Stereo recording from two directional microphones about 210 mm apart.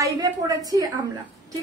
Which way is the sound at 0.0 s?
20° right (ahead or behind).